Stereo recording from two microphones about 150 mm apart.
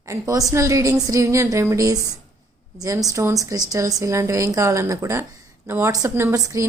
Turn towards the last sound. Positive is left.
turn(degrees=-20)  # may be behind; listen again after turning